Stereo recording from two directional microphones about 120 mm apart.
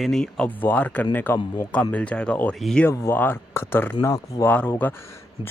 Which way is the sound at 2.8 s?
20° left (ahead or behind).